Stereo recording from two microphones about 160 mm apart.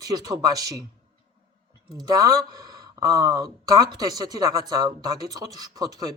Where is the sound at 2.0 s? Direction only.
20° right (ahead or behind).